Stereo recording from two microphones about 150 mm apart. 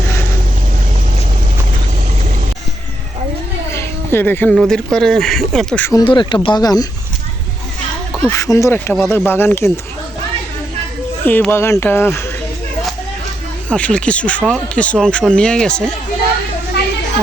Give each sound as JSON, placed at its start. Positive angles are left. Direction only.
{"t": 3.7, "sound": "a sound", "side_deg": 15}
{"t": 4.5, "sound": "speech", "side_deg": 0}
{"t": 5.8, "sound": "speech", "side_deg": 25}
{"t": 8.3, "sound": "speech", "side_deg": 20}
{"t": 11.3, "sound": "speech", "side_deg": 15}
{"t": 13.7, "sound": "speech", "side_deg": 10}